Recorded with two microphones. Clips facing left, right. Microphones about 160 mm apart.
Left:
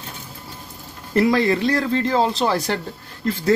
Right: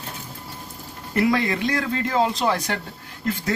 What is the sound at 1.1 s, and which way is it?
Speech, 30° left (ahead or behind).